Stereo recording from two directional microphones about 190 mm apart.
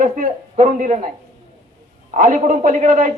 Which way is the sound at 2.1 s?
40° right (ahead or behind).